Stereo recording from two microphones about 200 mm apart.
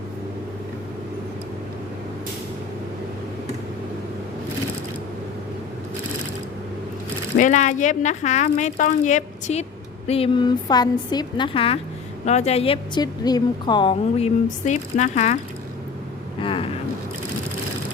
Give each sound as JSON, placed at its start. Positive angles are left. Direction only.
{"t": 7.3, "sound": "a woman's voice", "side_deg": 40}
{"t": 16.4, "sound": "vehicle", "side_deg": 25}